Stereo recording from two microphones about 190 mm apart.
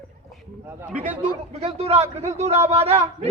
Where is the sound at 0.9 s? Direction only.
10° right (ahead or behind).